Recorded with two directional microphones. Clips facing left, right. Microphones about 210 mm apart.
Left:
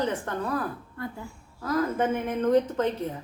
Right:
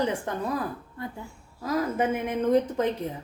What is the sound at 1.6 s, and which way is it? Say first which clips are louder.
Speech: even; 10° right (ahead or behind).